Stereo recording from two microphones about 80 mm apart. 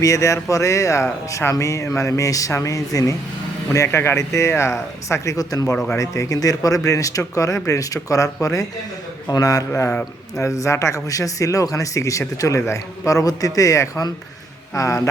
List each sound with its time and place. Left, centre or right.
0.0 s speech: left
5.7 s speech: centre
6.0 s speech: left